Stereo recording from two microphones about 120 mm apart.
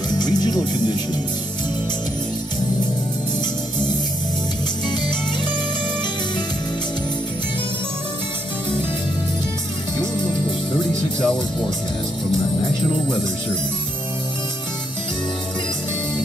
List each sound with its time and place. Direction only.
0.2 s music: 35° left (ahead or behind)
10.9 s music: 5° left (ahead or behind)